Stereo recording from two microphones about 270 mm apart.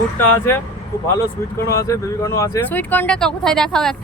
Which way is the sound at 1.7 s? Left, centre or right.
Centre.